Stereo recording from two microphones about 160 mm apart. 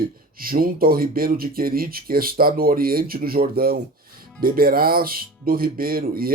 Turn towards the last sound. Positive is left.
turn(degrees=-65)  # may be behind; listen again after turning